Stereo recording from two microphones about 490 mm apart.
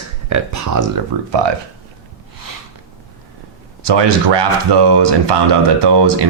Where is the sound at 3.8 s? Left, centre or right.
Right.